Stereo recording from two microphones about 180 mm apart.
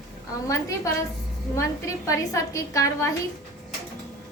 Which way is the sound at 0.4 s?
15° left (ahead or behind).